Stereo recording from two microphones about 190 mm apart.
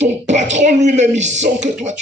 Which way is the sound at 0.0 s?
40° right (ahead or behind).